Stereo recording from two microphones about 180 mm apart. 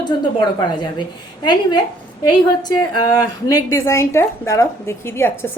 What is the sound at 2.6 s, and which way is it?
A woman's voice, 20° left (ahead or behind).